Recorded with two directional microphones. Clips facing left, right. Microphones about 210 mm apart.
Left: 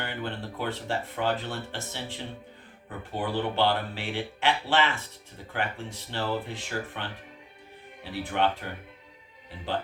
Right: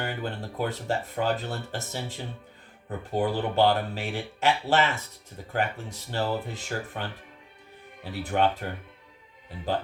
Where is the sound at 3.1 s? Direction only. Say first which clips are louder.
Right 3 dB; 40° right (ahead or behind).